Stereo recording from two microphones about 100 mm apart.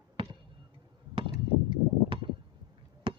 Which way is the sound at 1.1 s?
60° right (ahead or behind).